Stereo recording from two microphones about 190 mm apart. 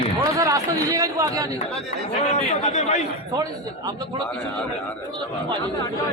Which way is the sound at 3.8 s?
20° right (ahead or behind).